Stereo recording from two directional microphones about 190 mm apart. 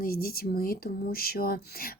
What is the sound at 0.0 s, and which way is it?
Speech, 50° left (ahead or behind).